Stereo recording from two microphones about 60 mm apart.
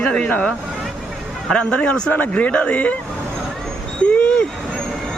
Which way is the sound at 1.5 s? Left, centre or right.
Centre.